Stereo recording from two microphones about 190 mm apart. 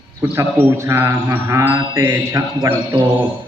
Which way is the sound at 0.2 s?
15° right (ahead or behind).